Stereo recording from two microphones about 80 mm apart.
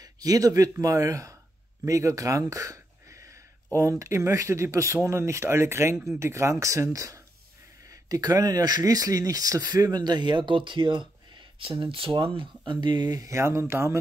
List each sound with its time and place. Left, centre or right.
0.0 s speech: right
11.8 s speech: right